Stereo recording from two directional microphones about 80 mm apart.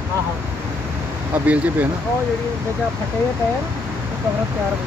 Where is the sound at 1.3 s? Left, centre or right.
Right.